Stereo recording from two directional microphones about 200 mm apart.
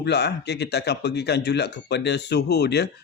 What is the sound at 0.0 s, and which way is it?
Speech, 55° left (ahead or behind).